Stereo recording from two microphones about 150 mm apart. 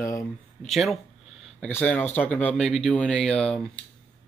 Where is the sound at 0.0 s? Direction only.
20° left (ahead or behind).